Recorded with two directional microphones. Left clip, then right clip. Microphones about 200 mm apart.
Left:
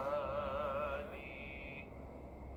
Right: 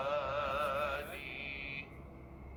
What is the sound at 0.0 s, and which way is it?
Music, 25° right (ahead or behind).